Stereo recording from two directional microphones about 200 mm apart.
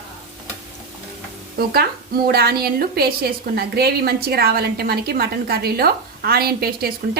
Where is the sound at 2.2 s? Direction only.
50° right (ahead or behind).